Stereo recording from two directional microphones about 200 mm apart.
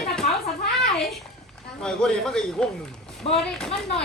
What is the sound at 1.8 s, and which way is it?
Speech, centre (ahead or behind).